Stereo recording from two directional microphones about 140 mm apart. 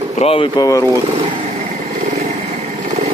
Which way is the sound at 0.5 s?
25° left (ahead or behind).